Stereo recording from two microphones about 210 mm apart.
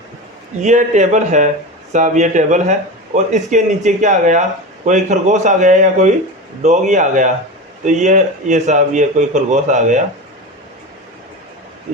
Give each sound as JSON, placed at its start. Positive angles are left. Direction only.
{"t": 0.6, "sound": "a man's voice", "side_deg": -35}